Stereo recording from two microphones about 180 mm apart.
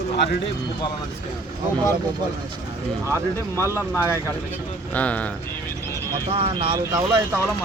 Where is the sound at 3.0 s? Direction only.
15° right (ahead or behind).